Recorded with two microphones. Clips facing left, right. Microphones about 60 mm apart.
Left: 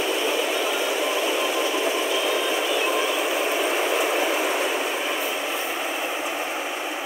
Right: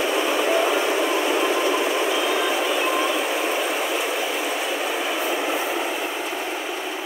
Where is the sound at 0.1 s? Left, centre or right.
Right.